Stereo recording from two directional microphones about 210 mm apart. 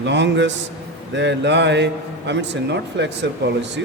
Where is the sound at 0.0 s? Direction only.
55° right (ahead or behind).